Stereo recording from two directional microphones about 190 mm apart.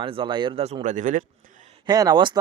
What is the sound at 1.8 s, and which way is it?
Speech, 20° right (ahead or behind).